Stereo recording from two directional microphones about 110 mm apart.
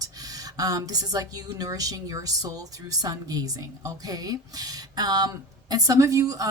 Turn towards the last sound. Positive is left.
turn(degrees=-30)  # may be behind; listen again after turning